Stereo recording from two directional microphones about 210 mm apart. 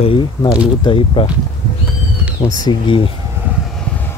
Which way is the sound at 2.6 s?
25° left (ahead or behind).